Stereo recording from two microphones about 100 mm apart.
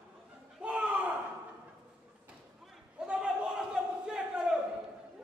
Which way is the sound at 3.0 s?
10° right (ahead or behind).